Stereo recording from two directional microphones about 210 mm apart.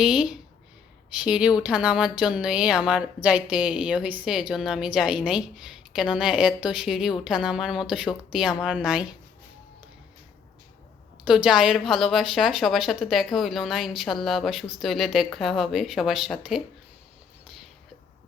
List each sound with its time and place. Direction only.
0.0 s a woman's voice: 5° right (ahead or behind)
11.3 s a woman's voice: 5° right (ahead or behind)